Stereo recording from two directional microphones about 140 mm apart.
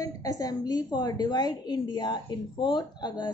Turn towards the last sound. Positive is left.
turn(degrees=30)  # may be behind; listen again after turning